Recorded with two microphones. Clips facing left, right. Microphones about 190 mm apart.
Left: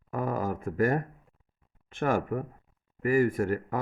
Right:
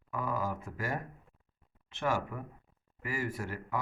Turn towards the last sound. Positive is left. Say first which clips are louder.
# left 10 dB
turn(degrees=50)  # may be behind; listen again after turning